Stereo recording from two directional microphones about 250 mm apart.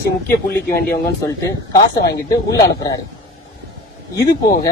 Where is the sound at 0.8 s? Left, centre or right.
Left.